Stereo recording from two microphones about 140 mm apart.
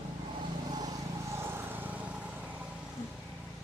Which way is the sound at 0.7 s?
30° right (ahead or behind).